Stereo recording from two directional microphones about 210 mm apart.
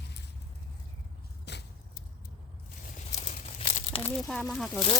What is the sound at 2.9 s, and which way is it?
Crumpling, 30° left (ahead or behind).